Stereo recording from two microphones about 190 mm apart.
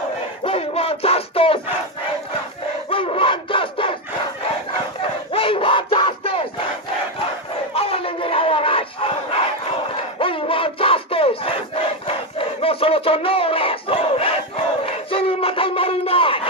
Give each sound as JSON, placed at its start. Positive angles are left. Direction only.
{"t": 0.4, "sound": "crowd", "side_deg": 30}
{"t": 2.9, "sound": "a sound", "side_deg": 30}
{"t": 5.3, "sound": "battle cry", "side_deg": 30}
{"t": 7.7, "sound": "battle cry", "side_deg": 30}